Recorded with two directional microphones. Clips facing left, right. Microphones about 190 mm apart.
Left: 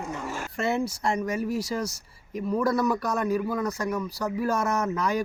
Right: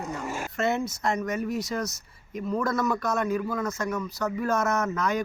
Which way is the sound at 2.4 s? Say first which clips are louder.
Left 2 dB; 10° left (ahead or behind).